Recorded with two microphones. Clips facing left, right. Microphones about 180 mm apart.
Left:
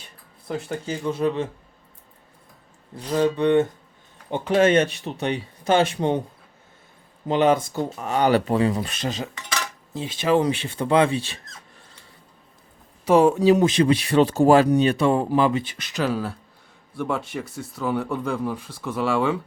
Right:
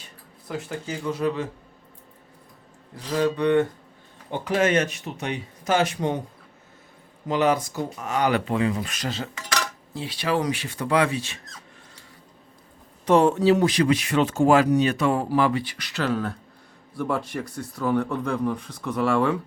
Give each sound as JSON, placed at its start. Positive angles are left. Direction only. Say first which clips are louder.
{"t": 0.4, "sound": "speech", "louder": "left 3 dB", "side_deg": 25}
{"t": 2.9, "sound": "speech", "louder": "left 2 dB", "side_deg": 25}
{"t": 7.3, "sound": "speech", "louder": "left 3 dB", "side_deg": 25}
{"t": 9.0, "sound": "cutlery", "louder": "left 2 dB", "side_deg": 15}
{"t": 9.3, "sound": "cutlery", "louder": "right 2 dB", "side_deg": 5}
{"t": 9.9, "sound": "speech", "louder": "left 5 dB", "side_deg": 20}
{"t": 13.1, "sound": "speech", "louder": "left 2 dB", "side_deg": 10}